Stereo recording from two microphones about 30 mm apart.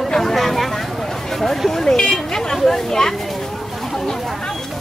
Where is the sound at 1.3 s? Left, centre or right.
Centre.